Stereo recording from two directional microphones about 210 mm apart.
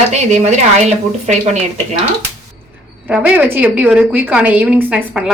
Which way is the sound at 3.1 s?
5° right (ahead or behind).